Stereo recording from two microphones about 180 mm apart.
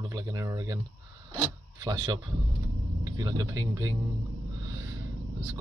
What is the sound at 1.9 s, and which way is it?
Speech, 20° right (ahead or behind).